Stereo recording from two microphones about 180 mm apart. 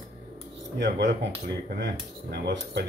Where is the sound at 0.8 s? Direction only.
70° right (ahead or behind).